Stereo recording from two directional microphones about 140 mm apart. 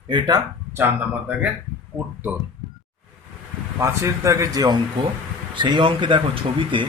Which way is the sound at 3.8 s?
20° right (ahead or behind).